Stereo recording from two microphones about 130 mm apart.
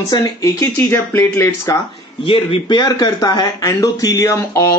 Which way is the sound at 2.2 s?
40° left (ahead or behind).